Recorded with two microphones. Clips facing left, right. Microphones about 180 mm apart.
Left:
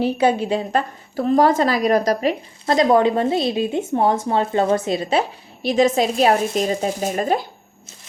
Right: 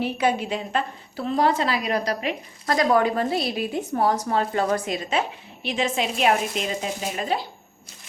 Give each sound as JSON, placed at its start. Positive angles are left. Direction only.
{"t": 0.0, "sound": "a woman's voice", "side_deg": 30}
{"t": 2.6, "sound": "a woman's voice", "side_deg": 25}